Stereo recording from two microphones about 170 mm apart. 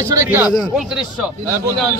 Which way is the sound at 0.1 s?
15° right (ahead or behind).